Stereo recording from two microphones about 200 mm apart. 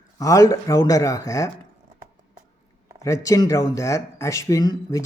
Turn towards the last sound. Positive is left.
turn(degrees=20)  # may be behind; listen again after turning